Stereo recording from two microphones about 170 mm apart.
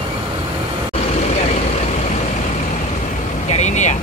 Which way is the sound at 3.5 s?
45° left (ahead or behind).